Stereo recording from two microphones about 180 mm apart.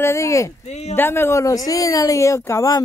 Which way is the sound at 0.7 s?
40° left (ahead or behind).